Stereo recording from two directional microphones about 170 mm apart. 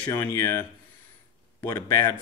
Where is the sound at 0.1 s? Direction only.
15° left (ahead or behind).